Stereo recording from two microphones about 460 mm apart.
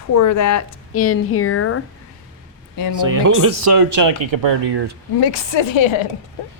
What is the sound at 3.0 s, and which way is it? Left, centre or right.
Speech, right.